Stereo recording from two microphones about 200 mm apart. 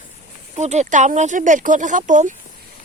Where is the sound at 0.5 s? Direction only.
35° right (ahead or behind).